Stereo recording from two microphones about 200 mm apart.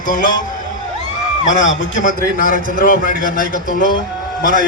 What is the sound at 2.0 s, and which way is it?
A man's voice, 45° left (ahead or behind).